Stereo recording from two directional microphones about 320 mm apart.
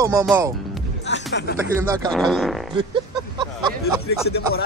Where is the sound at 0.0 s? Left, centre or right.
Centre.